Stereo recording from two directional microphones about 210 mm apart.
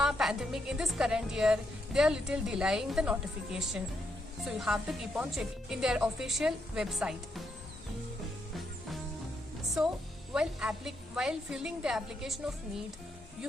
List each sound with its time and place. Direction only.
0.0 s a woman's voice: centre (ahead or behind)
9.8 s a woman's voice: centre (ahead or behind)